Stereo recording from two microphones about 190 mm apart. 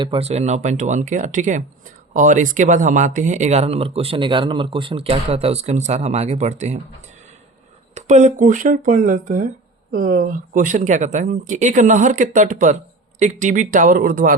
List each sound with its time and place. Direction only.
0.0 s speech: 30° right (ahead or behind)
7.9 s speech: 40° right (ahead or behind)